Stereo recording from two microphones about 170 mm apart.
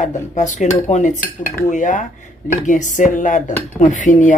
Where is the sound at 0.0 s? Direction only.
45° left (ahead or behind).